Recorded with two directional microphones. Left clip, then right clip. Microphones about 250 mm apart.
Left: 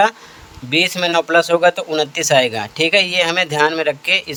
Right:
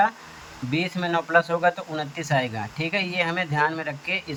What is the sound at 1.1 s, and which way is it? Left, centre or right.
A man's voice, left.